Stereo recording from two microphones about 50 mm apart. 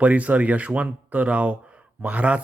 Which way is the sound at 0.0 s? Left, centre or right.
Right.